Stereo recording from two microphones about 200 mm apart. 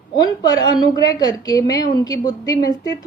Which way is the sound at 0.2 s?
20° left (ahead or behind).